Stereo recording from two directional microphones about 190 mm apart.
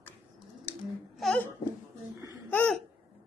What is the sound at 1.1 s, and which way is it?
Speech, centre (ahead or behind).